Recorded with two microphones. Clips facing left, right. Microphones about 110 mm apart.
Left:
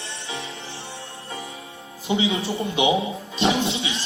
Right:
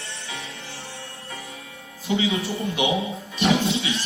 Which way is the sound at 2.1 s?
20° left (ahead or behind).